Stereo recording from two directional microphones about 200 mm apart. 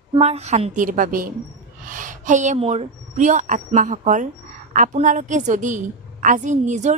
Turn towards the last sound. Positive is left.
turn(degrees=-35)  # may be behind; listen again after turning